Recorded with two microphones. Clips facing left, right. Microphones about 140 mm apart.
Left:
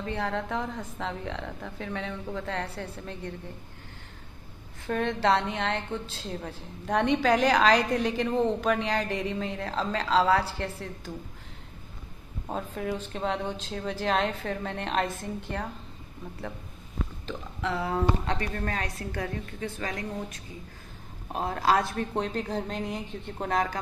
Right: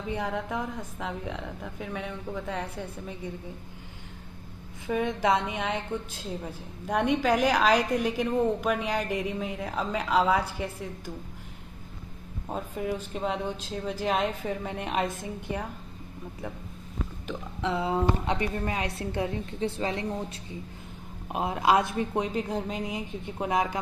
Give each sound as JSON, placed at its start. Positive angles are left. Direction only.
{"t": 0.0, "sound": "a woman's voice", "side_deg": -10}
{"t": 4.8, "sound": "a woman's voice", "side_deg": -10}
{"t": 12.4, "sound": "a woman's voice", "side_deg": 0}
{"t": 17.3, "sound": "speech", "side_deg": -20}
{"t": 21.3, "sound": "a woman's voice", "side_deg": -15}